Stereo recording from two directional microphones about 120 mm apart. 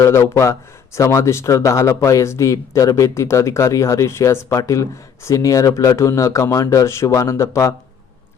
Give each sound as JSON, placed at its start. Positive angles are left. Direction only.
{"t": 0.0, "sound": "speech", "side_deg": 25}